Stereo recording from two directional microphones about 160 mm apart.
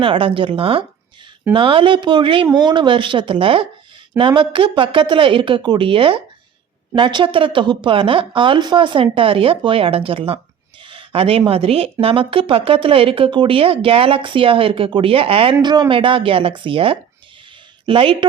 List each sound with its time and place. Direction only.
0.0 s speech: 35° right (ahead or behind)